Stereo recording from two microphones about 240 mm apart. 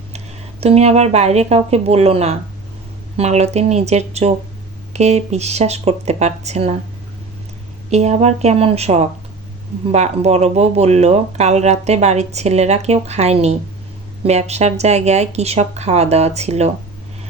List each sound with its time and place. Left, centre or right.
0.6 s speech: right
7.9 s speech: right